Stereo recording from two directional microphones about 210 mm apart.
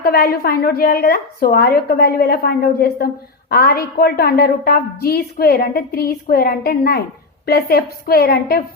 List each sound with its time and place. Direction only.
0.0 s a woman's voice: 45° left (ahead or behind)